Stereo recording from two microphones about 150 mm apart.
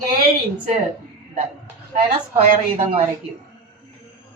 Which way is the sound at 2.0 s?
60° right (ahead or behind).